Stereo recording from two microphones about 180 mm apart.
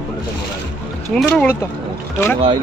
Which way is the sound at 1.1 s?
Centre (ahead or behind).